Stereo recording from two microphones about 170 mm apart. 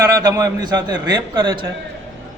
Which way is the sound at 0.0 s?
20° right (ahead or behind).